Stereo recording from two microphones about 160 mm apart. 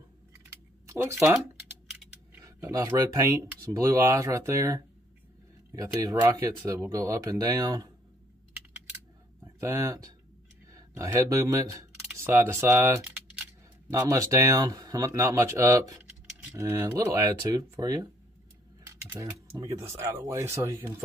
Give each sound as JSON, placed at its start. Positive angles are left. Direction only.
{"t": 0.8, "sound": "speech", "side_deg": -15}
{"t": 1.9, "sound": "a sound", "side_deg": -5}
{"t": 2.7, "sound": "speech", "side_deg": -20}
{"t": 9.4, "sound": "speech", "side_deg": -20}
{"t": 13.8, "sound": "speech", "side_deg": -20}
{"t": 18.9, "sound": "keys jangling", "side_deg": -15}
{"t": 19.6, "sound": "speech", "side_deg": -15}